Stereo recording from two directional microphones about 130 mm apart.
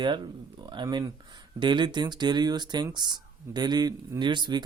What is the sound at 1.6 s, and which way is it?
Speech, 35° right (ahead or behind).